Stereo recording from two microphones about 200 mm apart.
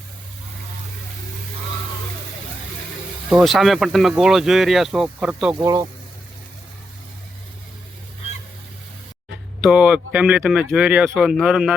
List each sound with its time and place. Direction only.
3.2 s speech: centre (ahead or behind)
5.5 s speech: 15° right (ahead or behind)
9.6 s speech: 5° right (ahead or behind)